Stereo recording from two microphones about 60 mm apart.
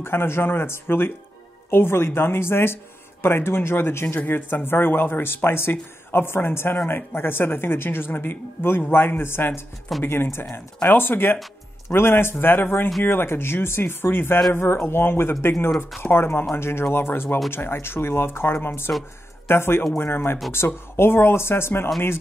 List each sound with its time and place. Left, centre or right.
0.0 s speech: left